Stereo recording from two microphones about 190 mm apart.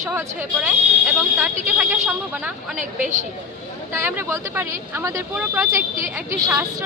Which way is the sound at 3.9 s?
15° right (ahead or behind).